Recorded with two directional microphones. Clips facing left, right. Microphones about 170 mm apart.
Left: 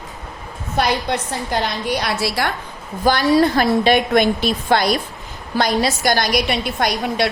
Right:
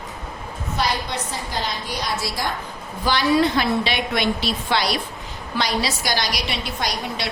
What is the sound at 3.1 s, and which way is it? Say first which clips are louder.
A woman's voice: left 4 dB; 45° left (ahead or behind).